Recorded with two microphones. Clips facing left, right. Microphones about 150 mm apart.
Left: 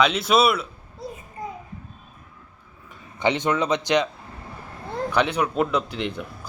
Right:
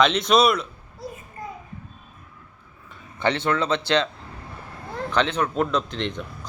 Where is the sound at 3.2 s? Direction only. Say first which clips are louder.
Left 1 dB; 15° left (ahead or behind).